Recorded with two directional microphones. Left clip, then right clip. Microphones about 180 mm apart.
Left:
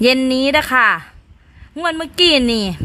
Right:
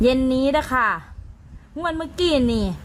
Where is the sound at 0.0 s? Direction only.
25° left (ahead or behind).